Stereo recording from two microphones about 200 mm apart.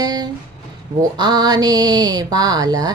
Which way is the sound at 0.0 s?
20° right (ahead or behind).